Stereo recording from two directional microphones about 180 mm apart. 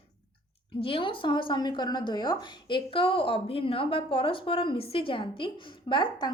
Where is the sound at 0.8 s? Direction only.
30° left (ahead or behind).